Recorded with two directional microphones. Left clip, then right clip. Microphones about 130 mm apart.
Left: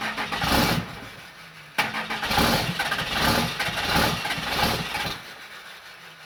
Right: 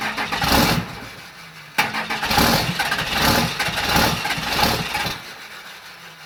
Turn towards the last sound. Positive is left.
turn(degrees=-30)  # may be behind; listen again after turning